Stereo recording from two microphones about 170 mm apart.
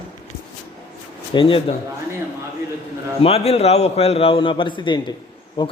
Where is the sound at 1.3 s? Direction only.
30° left (ahead or behind).